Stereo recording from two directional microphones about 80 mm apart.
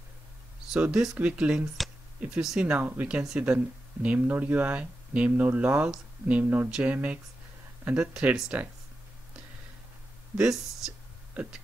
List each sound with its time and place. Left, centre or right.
0.7 s speech: centre
10.3 s speech: centre